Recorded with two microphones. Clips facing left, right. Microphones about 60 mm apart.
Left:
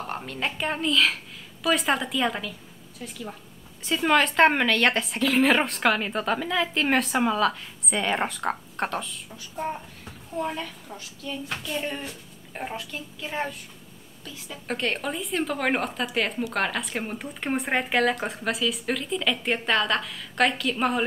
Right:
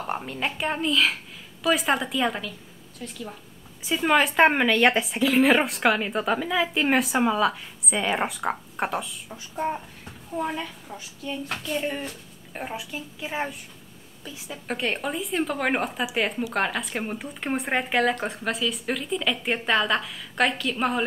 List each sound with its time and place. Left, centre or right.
0.0 s a woman's voice: centre
9.3 s a child's voice: right
10.3 s a woman's voice: centre
14.7 s speech: centre